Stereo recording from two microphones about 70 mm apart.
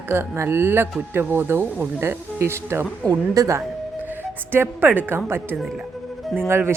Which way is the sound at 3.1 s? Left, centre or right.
Right.